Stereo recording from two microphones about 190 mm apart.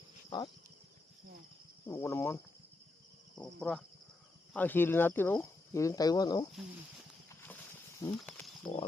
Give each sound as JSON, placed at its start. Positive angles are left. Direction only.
{"t": 0.3, "sound": "insect", "side_deg": 25}
{"t": 1.9, "sound": "speech", "side_deg": 15}
{"t": 7.3, "sound": "a sound", "side_deg": 10}
{"t": 8.7, "sound": "speech", "side_deg": 20}